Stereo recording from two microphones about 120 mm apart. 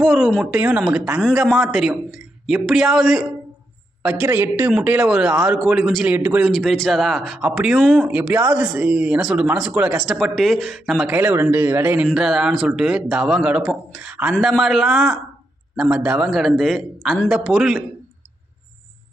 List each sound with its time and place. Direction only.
0.0 s a man's voice: centre (ahead or behind)
4.3 s a man's voice: 20° right (ahead or behind); by 6.1 s centre (ahead or behind)
6.1 s speech: 15° right (ahead or behind)
6.4 s a man's voice: 5° left (ahead or behind)
11.2 s speech: 20° right (ahead or behind)
12.1 s a man's voice: 5° right (ahead or behind)